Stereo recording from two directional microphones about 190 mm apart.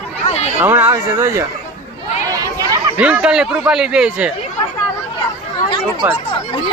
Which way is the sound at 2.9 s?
5° right (ahead or behind).